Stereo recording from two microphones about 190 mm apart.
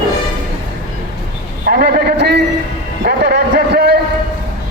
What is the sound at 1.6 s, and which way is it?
Speech, 50° right (ahead or behind).